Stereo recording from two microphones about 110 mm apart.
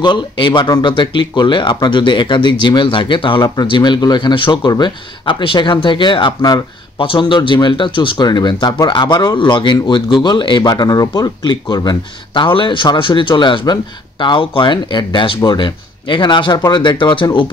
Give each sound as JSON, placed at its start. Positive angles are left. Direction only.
{"t": 0.0, "sound": "speech", "side_deg": 45}